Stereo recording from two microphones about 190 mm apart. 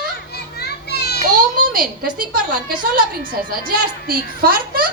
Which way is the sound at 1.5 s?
50° right (ahead or behind).